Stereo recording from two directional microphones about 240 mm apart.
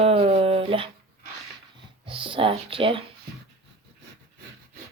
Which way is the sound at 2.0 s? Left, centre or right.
Right.